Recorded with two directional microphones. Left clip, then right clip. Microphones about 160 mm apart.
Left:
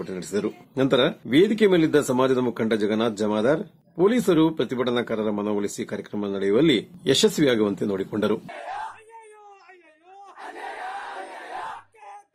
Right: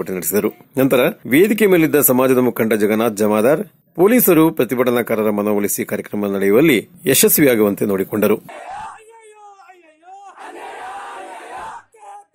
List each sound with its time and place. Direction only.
0.0 s speech: 40° right (ahead or behind)